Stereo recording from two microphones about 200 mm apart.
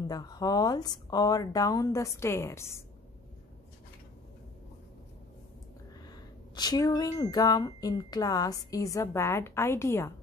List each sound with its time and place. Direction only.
0.0 s speech: 20° left (ahead or behind)
6.0 s speech: 20° left (ahead or behind)